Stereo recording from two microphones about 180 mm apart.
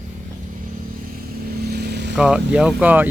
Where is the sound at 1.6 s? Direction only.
60° right (ahead or behind).